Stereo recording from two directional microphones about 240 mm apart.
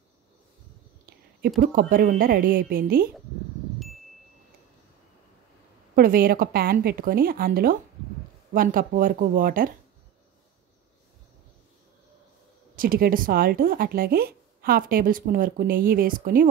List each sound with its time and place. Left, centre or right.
1.6 s speech: right
5.9 s speech: right
12.7 s speech: right